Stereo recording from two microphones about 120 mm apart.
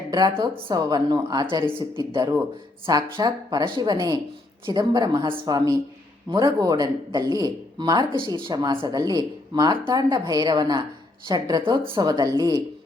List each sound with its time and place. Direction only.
0.1 s speech: 35° right (ahead or behind)